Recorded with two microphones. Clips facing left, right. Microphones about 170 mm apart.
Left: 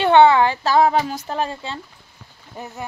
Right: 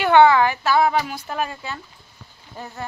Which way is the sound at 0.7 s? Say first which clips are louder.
Left 2 dB; 35° left (ahead or behind).